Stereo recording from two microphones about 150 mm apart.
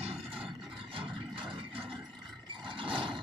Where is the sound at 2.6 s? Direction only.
35° right (ahead or behind).